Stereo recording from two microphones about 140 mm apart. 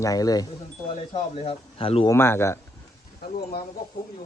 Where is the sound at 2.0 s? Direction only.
20° left (ahead or behind).